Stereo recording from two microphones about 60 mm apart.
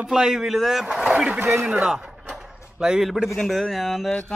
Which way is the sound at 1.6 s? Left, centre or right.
Centre.